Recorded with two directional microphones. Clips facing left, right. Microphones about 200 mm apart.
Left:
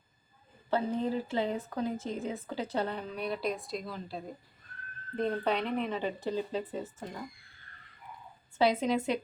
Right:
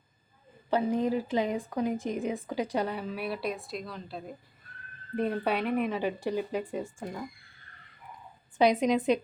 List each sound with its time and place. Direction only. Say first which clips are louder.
0.7 s a woman's voice: right 3 dB; 15° right (ahead or behind); by 4.2 s centre (ahead or behind)
5.1 s a woman's voice: right 2 dB; 10° right (ahead or behind)
8.5 s a woman's voice: right 3 dB; 15° right (ahead or behind)